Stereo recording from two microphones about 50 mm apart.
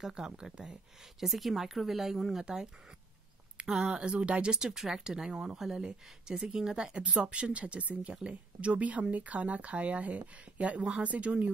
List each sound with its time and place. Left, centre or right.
0.0 s speech: centre
1.2 s speech: centre; by 11.5 s right